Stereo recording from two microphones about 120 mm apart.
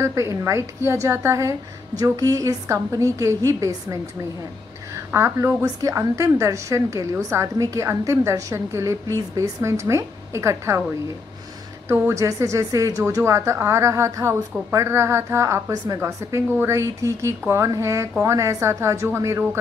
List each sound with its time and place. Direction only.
0.0 s a woman's voice: 25° right (ahead or behind)
5.1 s a woman's voice: 25° right (ahead or behind)
11.9 s a woman's voice: 25° right (ahead or behind)